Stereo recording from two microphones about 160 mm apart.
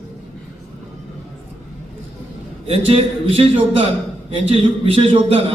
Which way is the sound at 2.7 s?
35° right (ahead or behind).